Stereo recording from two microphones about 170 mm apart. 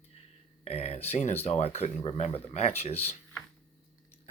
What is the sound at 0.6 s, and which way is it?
Speech, 40° left (ahead or behind).